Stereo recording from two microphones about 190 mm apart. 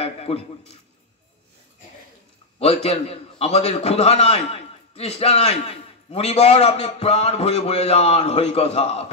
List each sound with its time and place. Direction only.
0.0 s a man's voice: 30° left (ahead or behind)
2.6 s a man's voice: 30° left (ahead or behind)